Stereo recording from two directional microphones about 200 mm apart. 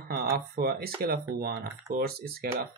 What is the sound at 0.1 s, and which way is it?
Speech, 50° right (ahead or behind).